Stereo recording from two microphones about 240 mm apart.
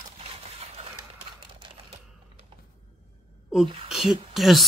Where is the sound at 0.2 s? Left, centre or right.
Right.